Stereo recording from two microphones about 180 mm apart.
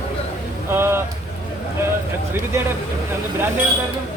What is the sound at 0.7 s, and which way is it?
Speech, 15° right (ahead or behind).